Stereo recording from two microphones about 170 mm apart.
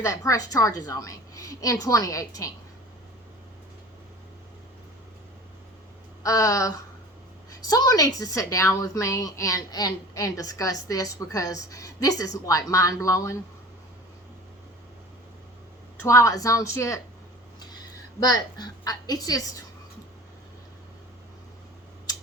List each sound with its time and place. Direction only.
0.0 s a woman's voice: 20° left (ahead or behind)
6.2 s a woman's voice: 20° left (ahead or behind)
16.0 s speech: 20° left (ahead or behind)
18.2 s a woman's voice: 25° left (ahead or behind)